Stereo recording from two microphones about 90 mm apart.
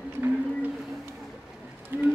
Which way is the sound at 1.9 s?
25° right (ahead or behind).